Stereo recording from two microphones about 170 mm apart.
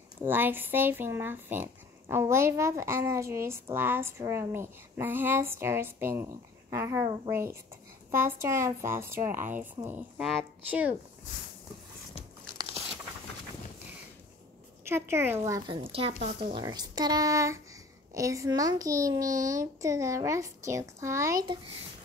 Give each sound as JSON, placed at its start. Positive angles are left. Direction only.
{"t": 0.2, "sound": "speech", "side_deg": -10}
{"t": 14.9, "sound": "speech", "side_deg": -15}
{"t": 15.7, "sound": "speech", "side_deg": -35}
{"t": 16.3, "sound": "a child's voice", "side_deg": -30}